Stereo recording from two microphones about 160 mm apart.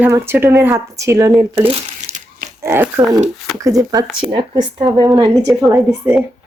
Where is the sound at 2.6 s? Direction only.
15° right (ahead or behind).